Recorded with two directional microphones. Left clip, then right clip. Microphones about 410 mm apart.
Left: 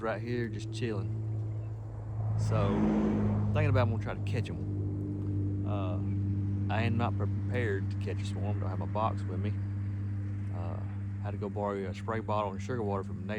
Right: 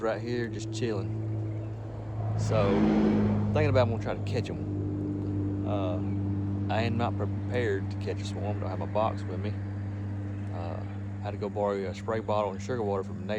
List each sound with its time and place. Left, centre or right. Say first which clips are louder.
0.0 s speech: right 4 dB; centre
2.7 s speech: right 5 dB; right
3.5 s speech: right 6 dB; centre
5.6 s speech: right 7 dB; centre
11.3 s speech: right 5 dB; centre